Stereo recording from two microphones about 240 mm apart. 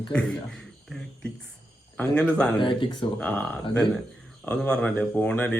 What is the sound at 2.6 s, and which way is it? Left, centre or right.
Speech, left.